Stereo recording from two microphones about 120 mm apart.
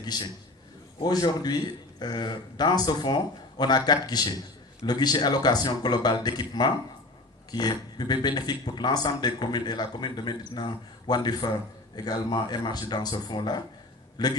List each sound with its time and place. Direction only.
0.0 s a man's voice: 35° left (ahead or behind)